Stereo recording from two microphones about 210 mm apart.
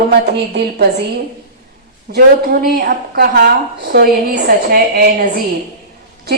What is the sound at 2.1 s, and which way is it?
A woman's voice, 45° right (ahead or behind).